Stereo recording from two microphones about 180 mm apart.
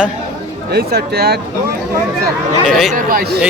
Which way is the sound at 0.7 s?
65° right (ahead or behind).